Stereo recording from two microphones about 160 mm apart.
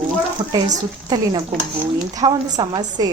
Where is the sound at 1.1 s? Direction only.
25° right (ahead or behind).